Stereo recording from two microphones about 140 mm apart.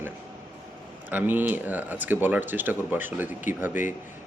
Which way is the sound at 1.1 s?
15° right (ahead or behind).